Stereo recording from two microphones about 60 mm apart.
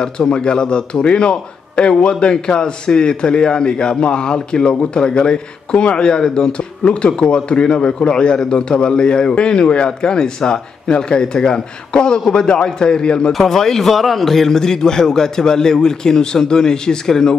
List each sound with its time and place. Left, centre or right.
0.0 s a man's voice: centre